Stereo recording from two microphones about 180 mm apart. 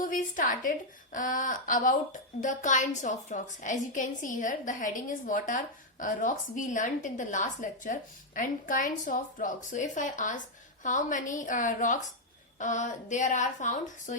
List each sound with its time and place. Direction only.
0.0 s a woman's voice: 45° left (ahead or behind)